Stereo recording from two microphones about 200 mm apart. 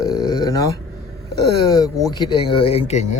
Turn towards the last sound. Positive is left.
turn(degrees=30)  # may be behind; listen again after turning